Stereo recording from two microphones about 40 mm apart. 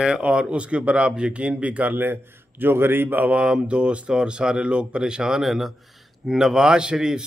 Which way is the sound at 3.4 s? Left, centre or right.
Right.